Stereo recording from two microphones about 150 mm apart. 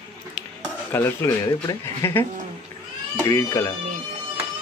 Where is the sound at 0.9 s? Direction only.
15° left (ahead or behind).